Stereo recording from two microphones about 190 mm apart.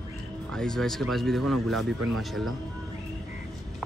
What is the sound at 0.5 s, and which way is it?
Speech, 5° left (ahead or behind).